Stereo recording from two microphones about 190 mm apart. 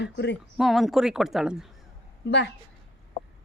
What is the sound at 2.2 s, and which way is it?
Speech, 65° left (ahead or behind).